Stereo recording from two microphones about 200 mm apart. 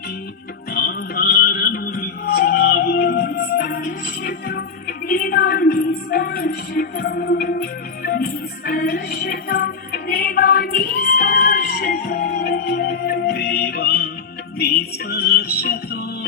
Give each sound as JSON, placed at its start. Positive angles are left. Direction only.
{"t": 0.7, "sound": "music", "side_deg": 45}